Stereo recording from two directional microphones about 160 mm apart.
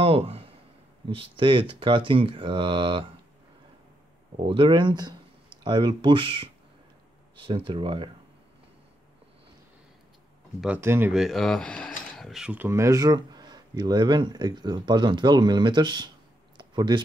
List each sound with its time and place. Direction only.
0.0 s a sound: 40° right (ahead or behind)
1.0 s speech: 35° right (ahead or behind)
4.5 s speech: 30° right (ahead or behind)
10.6 s speech: 10° right (ahead or behind)
11.1 s speech: centre (ahead or behind); by 16.1 s 30° right (ahead or behind)
16.5 s a sound: 30° right (ahead or behind)